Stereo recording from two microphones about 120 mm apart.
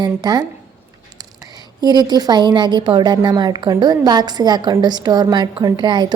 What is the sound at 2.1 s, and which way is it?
A woman's voice, 35° right (ahead or behind).